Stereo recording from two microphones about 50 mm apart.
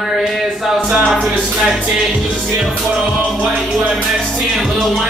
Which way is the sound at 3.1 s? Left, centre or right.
Centre.